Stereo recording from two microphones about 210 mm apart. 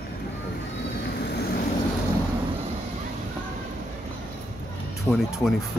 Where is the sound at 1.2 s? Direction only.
50° left (ahead or behind).